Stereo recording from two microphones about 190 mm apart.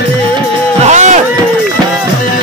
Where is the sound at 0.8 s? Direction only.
40° right (ahead or behind).